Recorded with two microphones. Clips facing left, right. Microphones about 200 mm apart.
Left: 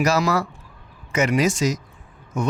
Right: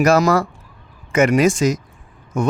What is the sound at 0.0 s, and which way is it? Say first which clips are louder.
Speech: right 6 dB; 50° right (ahead or behind).